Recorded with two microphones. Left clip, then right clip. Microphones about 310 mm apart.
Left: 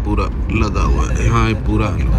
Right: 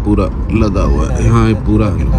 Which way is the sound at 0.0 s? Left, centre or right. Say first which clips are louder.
Right 6 dB; centre.